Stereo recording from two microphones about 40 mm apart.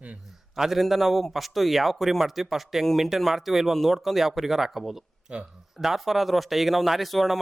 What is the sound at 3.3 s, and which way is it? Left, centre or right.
A man's voice, centre.